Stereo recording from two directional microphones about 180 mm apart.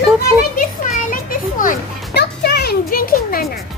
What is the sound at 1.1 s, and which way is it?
Children playing, 50° left (ahead or behind).